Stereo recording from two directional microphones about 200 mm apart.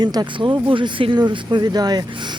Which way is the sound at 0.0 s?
20° right (ahead or behind).